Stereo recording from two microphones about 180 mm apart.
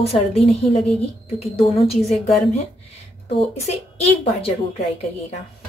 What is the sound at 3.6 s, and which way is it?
Speech, 35° left (ahead or behind).